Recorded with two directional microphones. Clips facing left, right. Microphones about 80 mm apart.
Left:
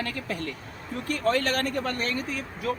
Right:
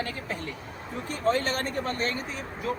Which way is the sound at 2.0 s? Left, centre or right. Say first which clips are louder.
Left 1 dB; right.